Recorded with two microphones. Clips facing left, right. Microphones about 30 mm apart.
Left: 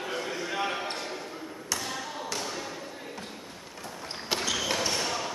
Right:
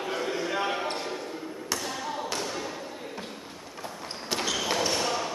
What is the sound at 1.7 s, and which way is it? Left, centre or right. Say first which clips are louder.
Tap: right 1 dB; centre.